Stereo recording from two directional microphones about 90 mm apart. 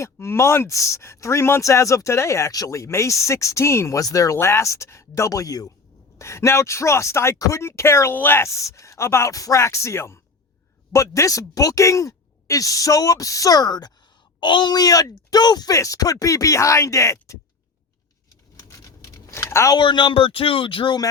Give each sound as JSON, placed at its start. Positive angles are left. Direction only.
{"t": 0.0, "sound": "speech", "side_deg": 30}
{"t": 6.1, "sound": "speech", "side_deg": 30}
{"t": 18.5, "sound": "a sound", "side_deg": 35}
{"t": 19.7, "sound": "speech", "side_deg": 60}